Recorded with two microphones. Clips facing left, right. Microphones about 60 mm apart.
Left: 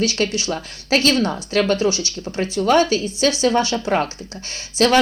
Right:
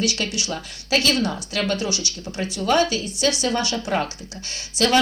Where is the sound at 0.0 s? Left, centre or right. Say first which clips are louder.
Left 4 dB; left.